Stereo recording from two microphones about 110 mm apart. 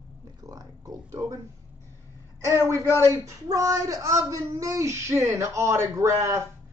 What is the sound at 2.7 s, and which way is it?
Speech, 25° left (ahead or behind).